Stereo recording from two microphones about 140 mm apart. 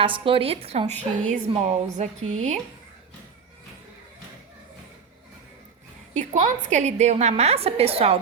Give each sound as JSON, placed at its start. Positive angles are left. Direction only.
{"t": 0.0, "sound": "a woman's voice", "side_deg": -40}
{"t": 0.9, "sound": "a woman's voice", "side_deg": 15}
{"t": 1.3, "sound": "a woman's voice", "side_deg": -60}
{"t": 6.1, "sound": "a woman's voice", "side_deg": -55}